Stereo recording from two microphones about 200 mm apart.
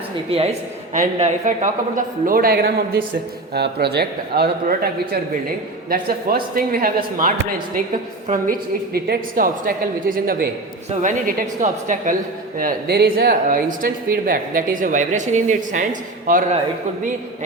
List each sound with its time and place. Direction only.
0.9 s speech: 40° right (ahead or behind)
5.9 s a woman's voice: 45° right (ahead or behind)